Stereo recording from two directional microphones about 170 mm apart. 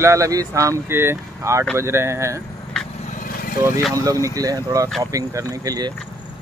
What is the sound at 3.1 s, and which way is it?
Vehicle, 55° left (ahead or behind).